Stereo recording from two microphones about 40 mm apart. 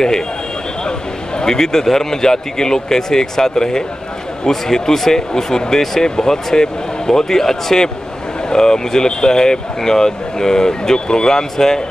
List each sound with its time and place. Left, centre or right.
1.4 s speech: centre